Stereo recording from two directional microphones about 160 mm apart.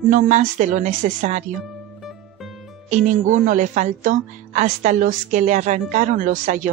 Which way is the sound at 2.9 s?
50° right (ahead or behind).